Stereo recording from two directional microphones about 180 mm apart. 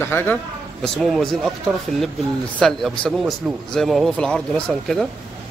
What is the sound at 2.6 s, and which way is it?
Speech, centre (ahead or behind).